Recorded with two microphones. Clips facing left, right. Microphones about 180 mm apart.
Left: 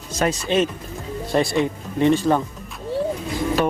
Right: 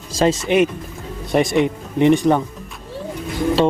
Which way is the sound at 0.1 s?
30° right (ahead or behind).